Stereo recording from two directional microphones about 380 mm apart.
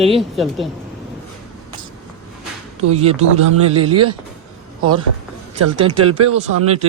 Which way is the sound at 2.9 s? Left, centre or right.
Centre.